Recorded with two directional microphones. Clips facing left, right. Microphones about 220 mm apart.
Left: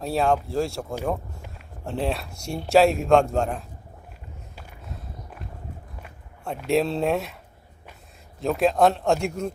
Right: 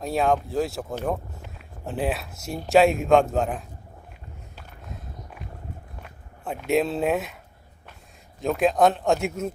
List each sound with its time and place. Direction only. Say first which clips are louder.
0.0 s a man's voice: even; centre (ahead or behind)
4.5 s a sound: even; centre (ahead or behind)
6.0 s speech: even; centre (ahead or behind)
8.4 s a man's voice: even; centre (ahead or behind)